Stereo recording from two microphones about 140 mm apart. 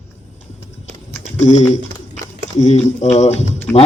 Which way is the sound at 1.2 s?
55° left (ahead or behind).